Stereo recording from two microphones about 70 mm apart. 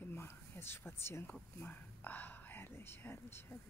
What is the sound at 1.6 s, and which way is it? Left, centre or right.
Speech, left.